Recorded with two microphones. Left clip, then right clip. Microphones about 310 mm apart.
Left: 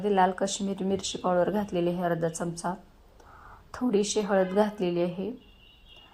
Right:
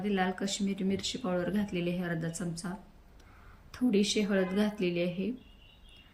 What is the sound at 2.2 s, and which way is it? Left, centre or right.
Speech, centre.